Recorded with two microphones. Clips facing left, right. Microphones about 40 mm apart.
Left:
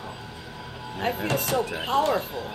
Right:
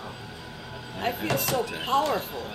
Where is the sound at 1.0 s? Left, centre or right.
Centre.